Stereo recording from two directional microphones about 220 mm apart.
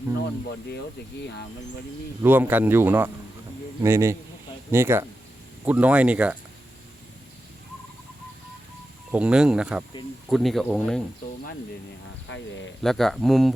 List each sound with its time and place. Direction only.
2.2 s speech: 10° right (ahead or behind)
9.1 s speech: 5° right (ahead or behind)
12.3 s speech: 55° left (ahead or behind)
12.8 s speech: centre (ahead or behind)